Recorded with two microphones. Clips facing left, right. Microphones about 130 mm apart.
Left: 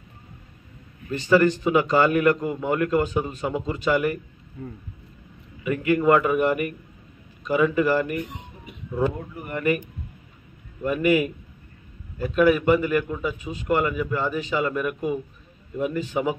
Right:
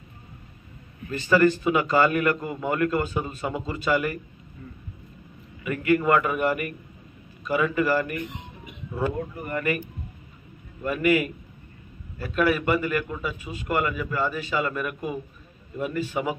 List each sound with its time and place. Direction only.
1.3 s a man's voice: 15° left (ahead or behind)
5.6 s a man's voice: 20° left (ahead or behind)
7.7 s a man's voice: 15° left (ahead or behind)